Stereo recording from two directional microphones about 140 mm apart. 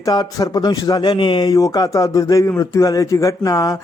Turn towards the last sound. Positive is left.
turn(degrees=25)  # may be behind; listen again after turning